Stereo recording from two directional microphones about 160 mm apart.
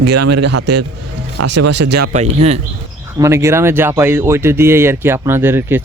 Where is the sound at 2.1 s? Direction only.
45° right (ahead or behind).